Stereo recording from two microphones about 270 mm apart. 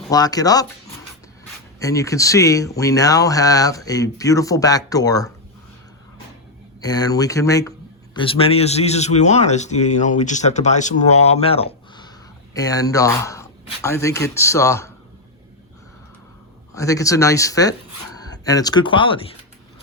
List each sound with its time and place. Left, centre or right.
0.1 s speech: centre
1.8 s speech: centre
6.8 s a man's voice: centre
16.7 s speech: centre